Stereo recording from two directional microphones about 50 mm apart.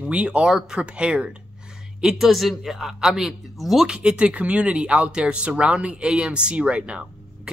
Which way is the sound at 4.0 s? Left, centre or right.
Centre.